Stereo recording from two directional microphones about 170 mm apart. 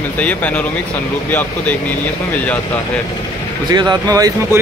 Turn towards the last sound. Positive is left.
turn(degrees=-20)  # may be behind; listen again after turning